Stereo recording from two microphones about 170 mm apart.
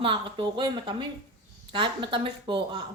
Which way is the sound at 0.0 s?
30° right (ahead or behind).